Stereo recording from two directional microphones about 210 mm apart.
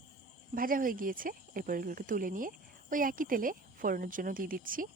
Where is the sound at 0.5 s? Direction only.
40° right (ahead or behind).